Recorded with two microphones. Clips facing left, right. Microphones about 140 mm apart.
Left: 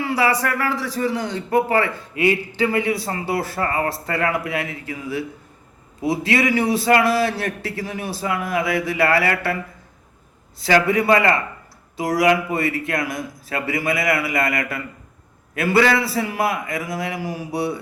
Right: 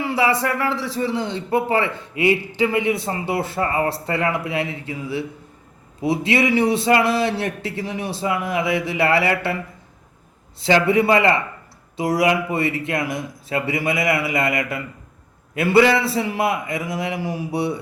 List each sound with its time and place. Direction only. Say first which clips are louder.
0.0 s a man's voice: even; 25° right (ahead or behind)
10.8 s a man's voice: right 1 dB; 25° right (ahead or behind)